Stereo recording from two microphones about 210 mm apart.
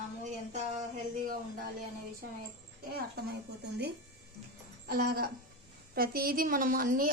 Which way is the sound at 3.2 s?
50° right (ahead or behind).